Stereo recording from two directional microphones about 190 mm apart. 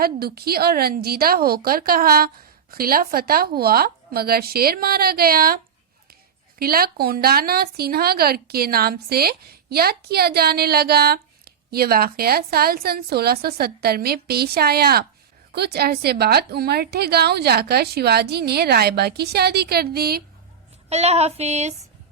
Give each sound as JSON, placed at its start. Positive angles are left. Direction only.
{"t": 0.0, "sound": "a woman's voice", "side_deg": -55}
{"t": 6.6, "sound": "a woman's voice", "side_deg": -50}
{"t": 20.9, "sound": "female singing", "side_deg": -35}